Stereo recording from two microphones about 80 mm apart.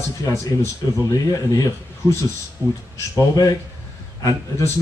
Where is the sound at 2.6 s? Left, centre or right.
Right.